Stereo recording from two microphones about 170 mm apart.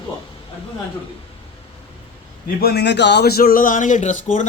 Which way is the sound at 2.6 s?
70° left (ahead or behind).